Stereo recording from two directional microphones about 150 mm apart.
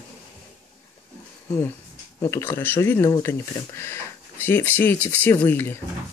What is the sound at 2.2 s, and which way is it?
Speech, 15° left (ahead or behind).